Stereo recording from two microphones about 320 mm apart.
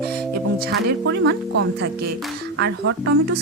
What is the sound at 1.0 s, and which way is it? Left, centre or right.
Speech, right.